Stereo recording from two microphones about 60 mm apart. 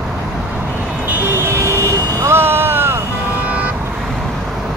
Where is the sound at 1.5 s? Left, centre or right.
Right.